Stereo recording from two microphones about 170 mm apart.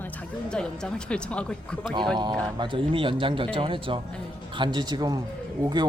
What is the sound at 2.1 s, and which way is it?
Speech, 25° right (ahead or behind).